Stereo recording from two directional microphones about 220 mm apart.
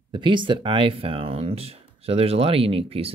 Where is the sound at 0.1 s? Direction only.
20° right (ahead or behind).